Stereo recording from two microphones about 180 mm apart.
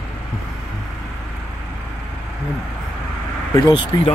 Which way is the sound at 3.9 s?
20° left (ahead or behind).